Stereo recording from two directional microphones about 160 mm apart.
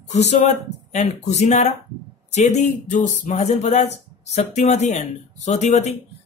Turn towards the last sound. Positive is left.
turn(degrees=45)  # may be behind; listen again after turning